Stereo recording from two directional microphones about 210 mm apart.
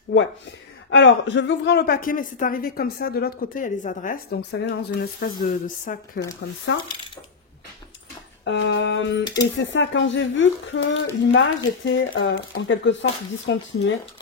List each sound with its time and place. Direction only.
0.8 s speech: 60° left (ahead or behind); by 6.0 s 40° left (ahead or behind)
6.4 s speech: 60° left (ahead or behind)
8.5 s speech: 60° left (ahead or behind)
9.2 s speech: 20° left (ahead or behind)
9.6 s speech: 60° left (ahead or behind)